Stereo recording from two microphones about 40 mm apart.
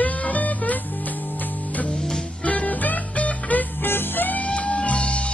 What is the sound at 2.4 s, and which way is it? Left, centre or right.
Music, left.